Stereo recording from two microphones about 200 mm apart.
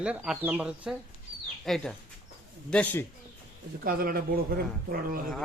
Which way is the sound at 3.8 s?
45° right (ahead or behind).